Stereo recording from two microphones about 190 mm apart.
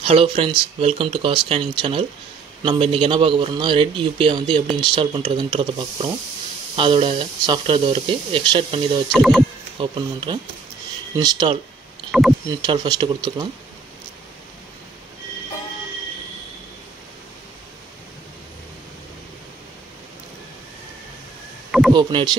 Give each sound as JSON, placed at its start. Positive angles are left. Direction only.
{"t": 0.0, "sound": "speech", "side_deg": -30}
{"t": 9.1, "sound": "speech", "side_deg": 0}
{"t": 9.8, "sound": "speech", "side_deg": -25}
{"t": 12.1, "sound": "speech", "side_deg": 0}
{"t": 12.6, "sound": "speech", "side_deg": -20}
{"t": 21.9, "sound": "speech", "side_deg": -25}